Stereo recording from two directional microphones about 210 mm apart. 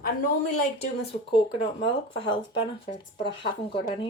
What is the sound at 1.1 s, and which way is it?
Speech, 25° left (ahead or behind).